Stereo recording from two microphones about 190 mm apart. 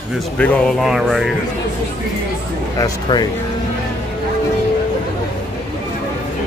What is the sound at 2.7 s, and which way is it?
Speech, 20° left (ahead or behind).